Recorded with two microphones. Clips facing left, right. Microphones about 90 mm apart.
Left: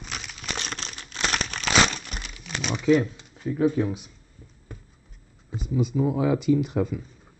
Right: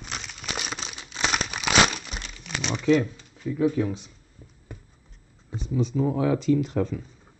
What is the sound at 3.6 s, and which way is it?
Speech, 20° left (ahead or behind).